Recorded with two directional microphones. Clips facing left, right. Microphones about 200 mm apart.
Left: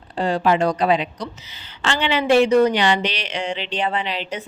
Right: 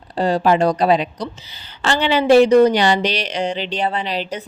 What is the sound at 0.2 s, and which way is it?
Speech, 40° right (ahead or behind).